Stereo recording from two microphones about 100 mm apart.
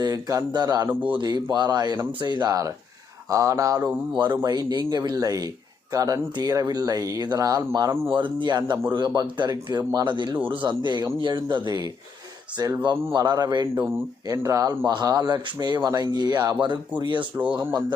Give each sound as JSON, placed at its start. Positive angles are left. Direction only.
{"t": 0.0, "sound": "speech", "side_deg": -35}
{"t": 2.5, "sound": "speech", "side_deg": -35}
{"t": 4.1, "sound": "speech", "side_deg": -50}
{"t": 8.1, "sound": "speech", "side_deg": -55}
{"t": 14.3, "sound": "speech", "side_deg": -35}
{"t": 17.3, "sound": "speech", "side_deg": -15}